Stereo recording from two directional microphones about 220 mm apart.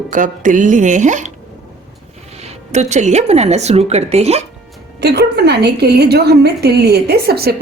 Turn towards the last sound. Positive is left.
turn(degrees=-45)  # may be behind; listen again after turning